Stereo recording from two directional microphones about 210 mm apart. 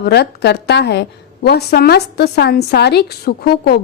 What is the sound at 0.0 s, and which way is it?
A woman's voice, 50° left (ahead or behind).